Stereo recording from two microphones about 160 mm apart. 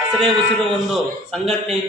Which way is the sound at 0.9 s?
Centre (ahead or behind).